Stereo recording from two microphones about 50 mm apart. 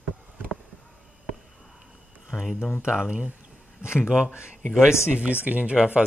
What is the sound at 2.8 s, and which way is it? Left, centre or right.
Speech, right.